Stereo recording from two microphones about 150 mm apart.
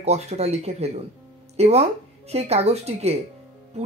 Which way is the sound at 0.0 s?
45° right (ahead or behind).